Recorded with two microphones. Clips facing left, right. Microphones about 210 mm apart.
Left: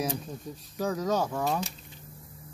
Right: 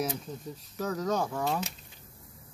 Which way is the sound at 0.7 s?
10° left (ahead or behind).